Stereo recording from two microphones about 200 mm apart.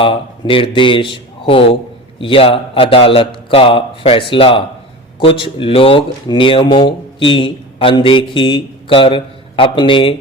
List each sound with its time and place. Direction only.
0.0 s speech: 25° left (ahead or behind)